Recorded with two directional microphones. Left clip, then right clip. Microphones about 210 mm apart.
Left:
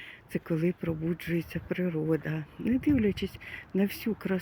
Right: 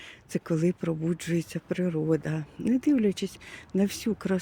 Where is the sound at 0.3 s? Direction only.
15° right (ahead or behind).